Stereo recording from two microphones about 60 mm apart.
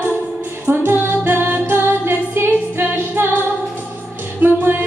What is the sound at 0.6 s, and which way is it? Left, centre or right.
Music, right.